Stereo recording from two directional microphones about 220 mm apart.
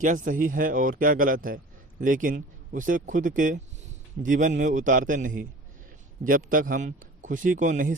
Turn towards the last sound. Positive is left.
turn(degrees=-35)  # may be behind; listen again after turning